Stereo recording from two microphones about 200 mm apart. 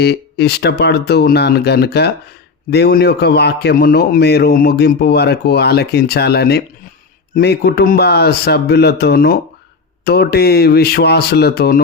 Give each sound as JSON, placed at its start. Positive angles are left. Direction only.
{"t": 0.0, "sound": "a man's voice", "side_deg": 55}